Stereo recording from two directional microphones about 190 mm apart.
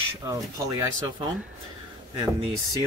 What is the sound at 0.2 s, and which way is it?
Speech, 20° right (ahead or behind).